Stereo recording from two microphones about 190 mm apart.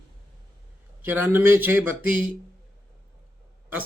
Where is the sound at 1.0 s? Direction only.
10° right (ahead or behind).